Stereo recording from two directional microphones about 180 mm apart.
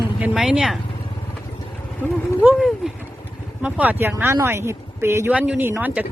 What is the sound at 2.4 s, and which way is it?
Speech, 10° right (ahead or behind).